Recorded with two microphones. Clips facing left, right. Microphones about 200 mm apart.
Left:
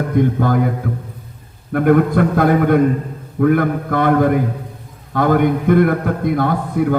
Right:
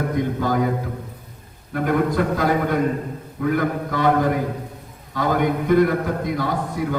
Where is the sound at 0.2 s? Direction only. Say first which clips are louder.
Left 7 dB; 55° left (ahead or behind).